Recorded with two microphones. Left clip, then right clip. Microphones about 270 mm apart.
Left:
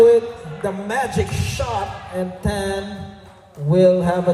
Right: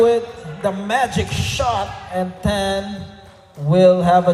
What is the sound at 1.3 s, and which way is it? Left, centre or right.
Music, centre.